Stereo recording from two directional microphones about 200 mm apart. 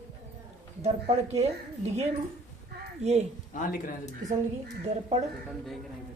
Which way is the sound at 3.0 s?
35° right (ahead or behind).